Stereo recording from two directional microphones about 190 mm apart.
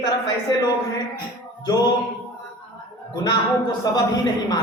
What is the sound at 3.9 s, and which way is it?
Speech, 20° left (ahead or behind).